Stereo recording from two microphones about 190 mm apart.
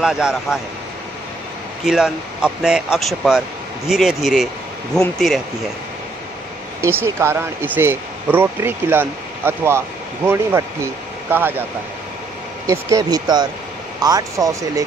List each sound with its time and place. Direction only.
0.0 s speech: 5° right (ahead or behind)
1.9 s speech: 5° right (ahead or behind)
6.8 s speech: 10° right (ahead or behind)
12.6 s speech: 20° right (ahead or behind)